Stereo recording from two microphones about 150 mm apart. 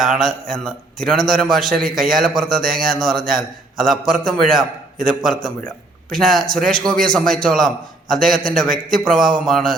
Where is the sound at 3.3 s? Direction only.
Centre (ahead or behind).